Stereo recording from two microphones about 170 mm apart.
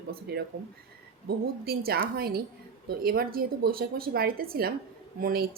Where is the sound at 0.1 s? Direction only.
75° right (ahead or behind).